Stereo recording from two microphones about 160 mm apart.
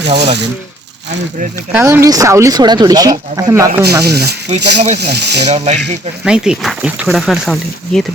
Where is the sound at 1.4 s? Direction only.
55° right (ahead or behind).